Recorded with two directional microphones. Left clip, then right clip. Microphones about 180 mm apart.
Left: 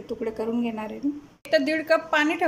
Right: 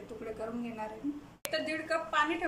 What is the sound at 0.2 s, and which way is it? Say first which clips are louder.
Speech: left 11 dB; 45° left (ahead or behind).